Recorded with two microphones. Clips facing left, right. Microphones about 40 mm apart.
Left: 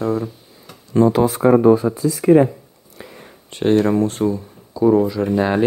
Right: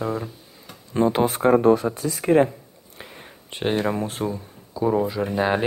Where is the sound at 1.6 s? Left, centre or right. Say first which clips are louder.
Left 4 dB; right.